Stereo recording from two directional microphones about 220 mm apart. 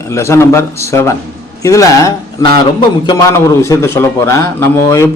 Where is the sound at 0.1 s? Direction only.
10° left (ahead or behind).